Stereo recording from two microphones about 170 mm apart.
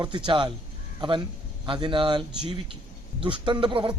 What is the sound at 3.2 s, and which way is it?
Speech, 30° right (ahead or behind).